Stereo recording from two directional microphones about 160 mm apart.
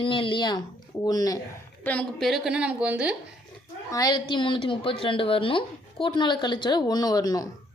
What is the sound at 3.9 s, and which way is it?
A woman's voice, 25° left (ahead or behind).